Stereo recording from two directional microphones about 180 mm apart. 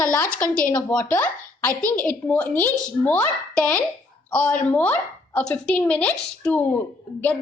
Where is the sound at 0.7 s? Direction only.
15° left (ahead or behind).